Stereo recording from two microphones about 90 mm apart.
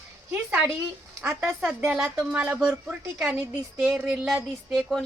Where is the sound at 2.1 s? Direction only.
15° right (ahead or behind).